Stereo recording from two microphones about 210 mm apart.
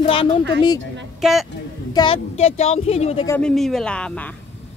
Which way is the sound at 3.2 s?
5° left (ahead or behind).